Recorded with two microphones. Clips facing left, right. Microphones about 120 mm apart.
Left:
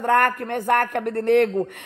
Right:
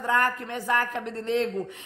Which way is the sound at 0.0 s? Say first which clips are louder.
Left 6 dB; 60° left (ahead or behind).